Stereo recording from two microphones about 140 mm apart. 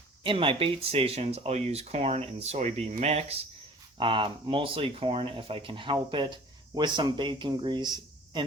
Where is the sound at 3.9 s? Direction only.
35° right (ahead or behind).